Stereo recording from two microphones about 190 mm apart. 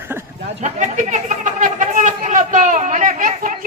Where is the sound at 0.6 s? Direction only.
40° right (ahead or behind).